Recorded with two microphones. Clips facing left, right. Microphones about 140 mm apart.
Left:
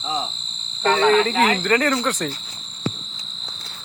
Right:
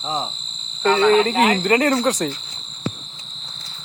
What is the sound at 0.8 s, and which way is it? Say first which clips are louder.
Speech: right 2 dB; 30° left (ahead or behind).